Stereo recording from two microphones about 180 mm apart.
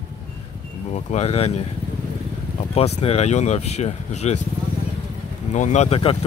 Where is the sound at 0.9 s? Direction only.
35° left (ahead or behind).